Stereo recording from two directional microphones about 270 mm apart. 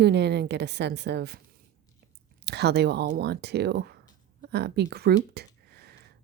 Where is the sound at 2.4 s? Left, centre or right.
Right.